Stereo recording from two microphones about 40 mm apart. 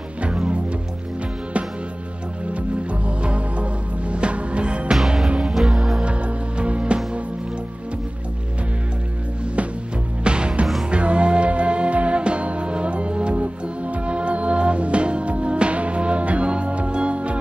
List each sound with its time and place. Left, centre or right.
2.5 s music: right
5.5 s music: centre
5.9 s music: right
10.2 s music: right